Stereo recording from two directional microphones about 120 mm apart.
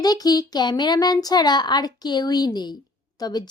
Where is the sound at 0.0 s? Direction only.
35° left (ahead or behind).